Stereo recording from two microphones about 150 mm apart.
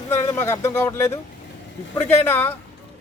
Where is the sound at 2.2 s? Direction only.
15° left (ahead or behind).